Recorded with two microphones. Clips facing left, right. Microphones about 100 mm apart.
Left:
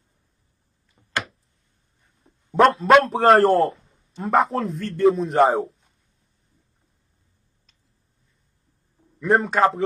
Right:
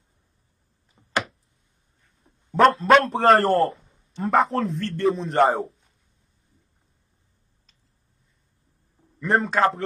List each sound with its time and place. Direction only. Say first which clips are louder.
1.0 s a sound: right 1 dB; 25° right (ahead or behind)
2.5 s a man's voice: left 1 dB; centre (ahead or behind)
9.2 s a man's voice: left 2 dB; centre (ahead or behind)